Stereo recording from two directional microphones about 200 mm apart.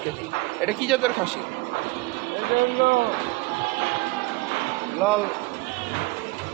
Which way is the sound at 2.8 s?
45° right (ahead or behind).